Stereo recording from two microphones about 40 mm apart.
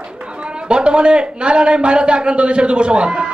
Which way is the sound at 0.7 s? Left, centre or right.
Right.